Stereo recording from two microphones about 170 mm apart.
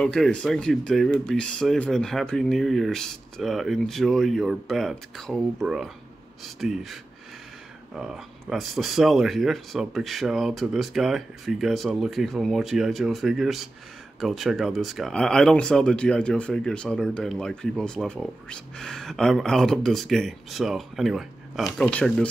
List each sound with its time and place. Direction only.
0.0 s speech: 5° left (ahead or behind)
8.0 s speech: 5° right (ahead or behind)